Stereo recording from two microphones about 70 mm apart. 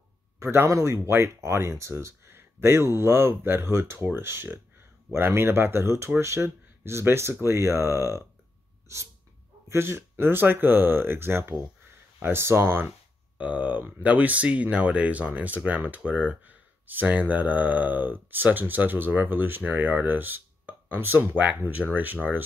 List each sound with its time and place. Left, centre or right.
0.4 s speech: right
8.9 s sneeze: right
9.7 s speech: right
13.4 s speech: right